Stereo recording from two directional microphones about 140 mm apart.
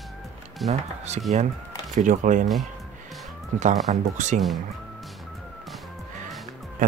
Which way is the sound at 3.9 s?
55° right (ahead or behind).